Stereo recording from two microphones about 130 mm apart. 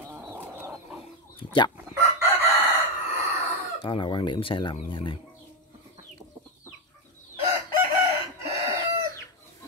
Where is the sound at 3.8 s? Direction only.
35° left (ahead or behind).